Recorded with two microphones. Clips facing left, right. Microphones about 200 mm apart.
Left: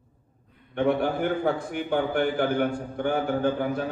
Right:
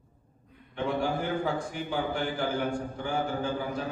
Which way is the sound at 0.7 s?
60° left (ahead or behind).